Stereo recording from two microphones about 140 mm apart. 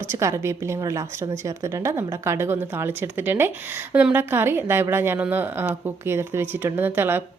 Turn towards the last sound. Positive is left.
turn(degrees=-15)  # may be behind; listen again after turning